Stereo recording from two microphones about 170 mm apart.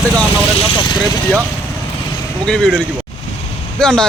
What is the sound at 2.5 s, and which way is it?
Speech, 5° left (ahead or behind).